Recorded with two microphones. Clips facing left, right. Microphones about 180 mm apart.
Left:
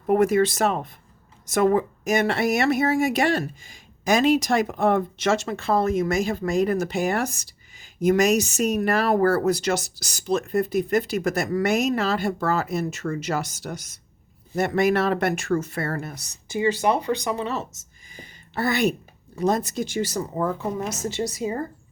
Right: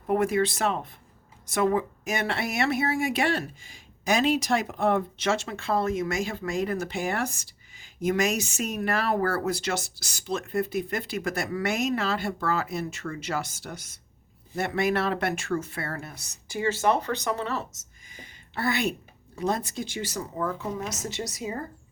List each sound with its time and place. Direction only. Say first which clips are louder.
0.1 s speech: left 5 dB; 45° left (ahead or behind)
16.5 s speech: left 3 dB; 15° left (ahead or behind)
18.1 s a sound: left 4 dB; 40° left (ahead or behind)
19.4 s a woman's voice: left 5 dB; 40° left (ahead or behind)